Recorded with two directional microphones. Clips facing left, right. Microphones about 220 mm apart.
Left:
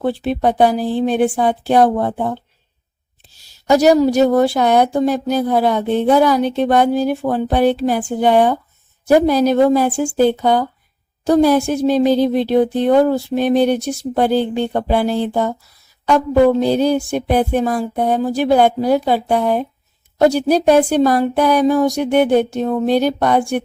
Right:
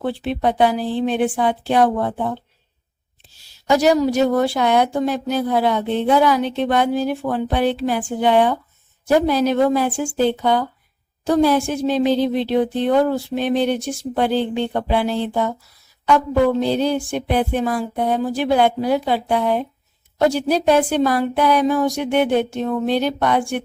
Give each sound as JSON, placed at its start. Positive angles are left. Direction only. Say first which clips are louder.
{"t": 0.0, "sound": "a woman's voice", "louder": "left 4 dB", "side_deg": 40}
{"t": 3.7, "sound": "a woman's voice", "louder": "left 4 dB", "side_deg": 40}
{"t": 16.0, "sound": "a sound", "louder": "left 4 dB", "side_deg": 40}
{"t": 20.1, "sound": "a woman's voice", "louder": "left 4 dB", "side_deg": 40}